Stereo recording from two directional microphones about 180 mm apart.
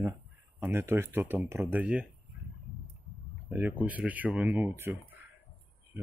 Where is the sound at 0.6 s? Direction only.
15° right (ahead or behind).